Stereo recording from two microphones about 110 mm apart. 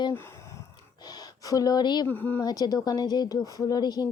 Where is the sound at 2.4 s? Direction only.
35° left (ahead or behind).